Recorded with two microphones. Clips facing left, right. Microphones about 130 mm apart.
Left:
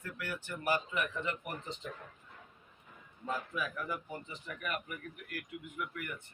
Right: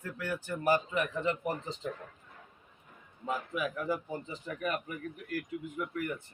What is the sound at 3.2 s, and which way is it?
A man's voice, 20° right (ahead or behind).